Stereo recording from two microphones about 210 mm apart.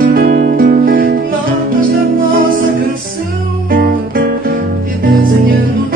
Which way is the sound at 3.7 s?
45° right (ahead or behind).